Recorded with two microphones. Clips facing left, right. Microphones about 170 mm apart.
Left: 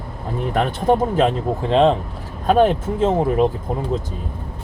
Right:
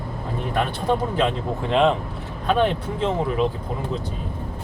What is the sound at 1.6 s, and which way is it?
Speech, 30° left (ahead or behind).